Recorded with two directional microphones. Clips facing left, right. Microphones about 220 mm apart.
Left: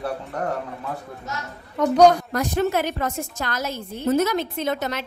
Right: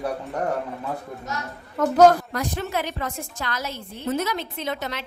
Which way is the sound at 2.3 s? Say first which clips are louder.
Left 5 dB; 45° left (ahead or behind).